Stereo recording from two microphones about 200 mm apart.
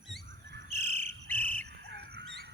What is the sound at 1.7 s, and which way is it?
Bird, 55° right (ahead or behind).